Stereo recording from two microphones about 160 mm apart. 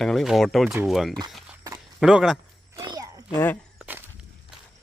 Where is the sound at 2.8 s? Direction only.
25° right (ahead or behind).